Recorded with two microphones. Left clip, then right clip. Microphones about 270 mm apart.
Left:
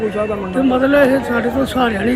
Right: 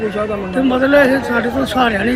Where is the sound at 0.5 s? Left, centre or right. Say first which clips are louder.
Right 1 dB; centre.